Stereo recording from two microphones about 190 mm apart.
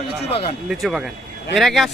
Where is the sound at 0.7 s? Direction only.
Centre (ahead or behind).